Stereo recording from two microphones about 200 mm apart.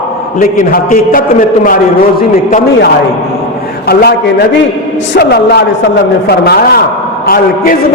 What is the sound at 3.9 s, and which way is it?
A man's voice, 50° left (ahead or behind).